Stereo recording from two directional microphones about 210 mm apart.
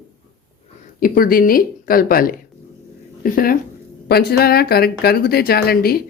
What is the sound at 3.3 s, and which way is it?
Speech, 45° left (ahead or behind).